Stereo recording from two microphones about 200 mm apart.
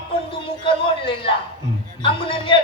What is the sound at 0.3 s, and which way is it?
A man's voice, 25° left (ahead or behind).